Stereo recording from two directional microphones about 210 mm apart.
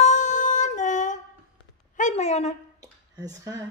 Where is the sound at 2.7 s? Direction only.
15° right (ahead or behind).